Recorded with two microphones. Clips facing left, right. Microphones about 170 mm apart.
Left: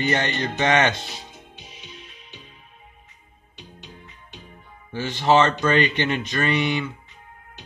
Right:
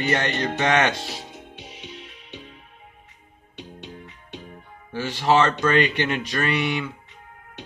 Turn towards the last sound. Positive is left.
turn(degrees=-5)  # may be behind; listen again after turning